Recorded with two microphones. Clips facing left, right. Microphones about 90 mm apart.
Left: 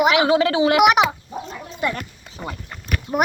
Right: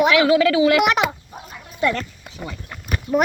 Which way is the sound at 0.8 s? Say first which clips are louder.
Left 4 dB; 15° left (ahead or behind).